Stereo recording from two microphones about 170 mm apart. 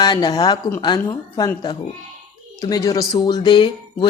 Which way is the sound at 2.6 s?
20° left (ahead or behind).